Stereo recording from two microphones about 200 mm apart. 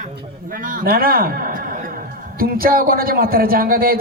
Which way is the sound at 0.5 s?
45° right (ahead or behind).